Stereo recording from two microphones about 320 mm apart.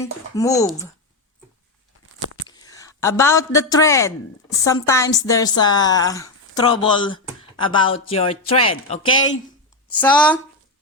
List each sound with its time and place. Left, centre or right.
0.0 s a woman's voice: centre
2.5 s a woman's voice: centre
9.1 s speech: left
9.9 s speech: centre